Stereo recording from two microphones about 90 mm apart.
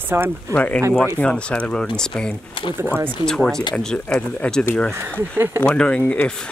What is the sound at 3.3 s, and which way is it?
Speech, 5° left (ahead or behind).